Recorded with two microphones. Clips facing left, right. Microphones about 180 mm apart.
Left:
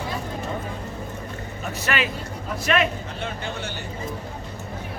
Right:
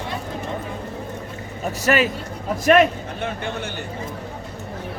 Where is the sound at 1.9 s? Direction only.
40° right (ahead or behind).